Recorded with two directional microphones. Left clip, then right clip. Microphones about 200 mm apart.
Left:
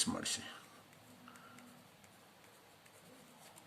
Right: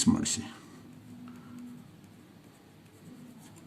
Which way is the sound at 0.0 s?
30° right (ahead or behind).